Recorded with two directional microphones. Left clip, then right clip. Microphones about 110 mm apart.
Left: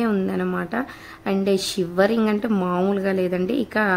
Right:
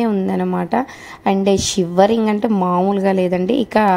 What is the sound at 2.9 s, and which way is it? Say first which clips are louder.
A woman's voice: right 6 dB; 45° right (ahead or behind).